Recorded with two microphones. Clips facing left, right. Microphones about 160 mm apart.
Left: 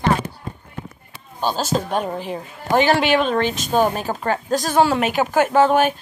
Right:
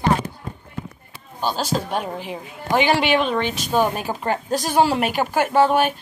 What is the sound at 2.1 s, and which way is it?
A woman's voice, 45° left (ahead or behind).